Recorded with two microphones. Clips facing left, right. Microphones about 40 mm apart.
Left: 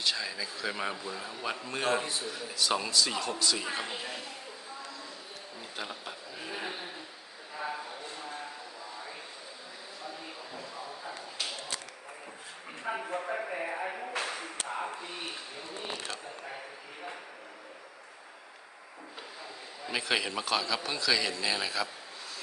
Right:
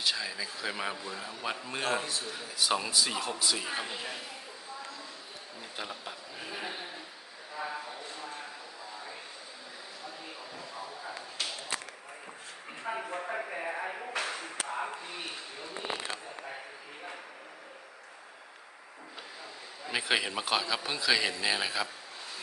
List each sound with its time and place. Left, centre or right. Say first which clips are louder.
0.0 s speech: even; centre
2.7 s a man's voice: left 2 dB; centre
5.7 s a man's voice: even; centre
7.6 s a sound: left 1 dB; centre
12.8 s a sound: left 1 dB; centre
19.9 s a man's voice: right 1 dB; centre